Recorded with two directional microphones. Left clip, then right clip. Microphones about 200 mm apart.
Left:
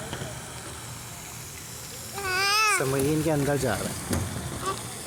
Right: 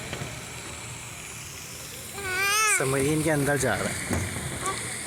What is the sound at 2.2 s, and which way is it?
Babbling, 30° left (ahead or behind).